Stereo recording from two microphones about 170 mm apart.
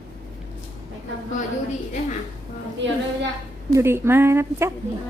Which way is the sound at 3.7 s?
15° right (ahead or behind).